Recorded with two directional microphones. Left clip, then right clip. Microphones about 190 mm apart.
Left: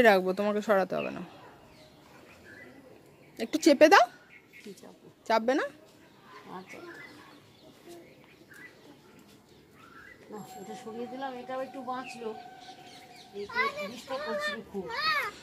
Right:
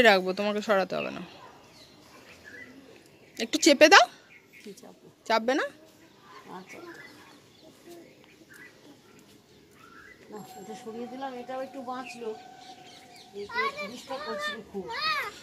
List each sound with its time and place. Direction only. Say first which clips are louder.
0.0 s speech: right 1 dB; 5° left (ahead or behind)
3.3 s speech: right 2 dB; centre (ahead or behind)
5.2 s speech: right 1 dB; centre (ahead or behind)
10.3 s speech: even; 15° right (ahead or behind)
13.6 s a child's voice: even; 40° right (ahead or behind)